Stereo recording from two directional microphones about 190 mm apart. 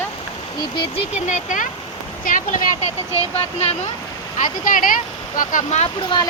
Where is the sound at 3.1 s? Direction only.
30° left (ahead or behind).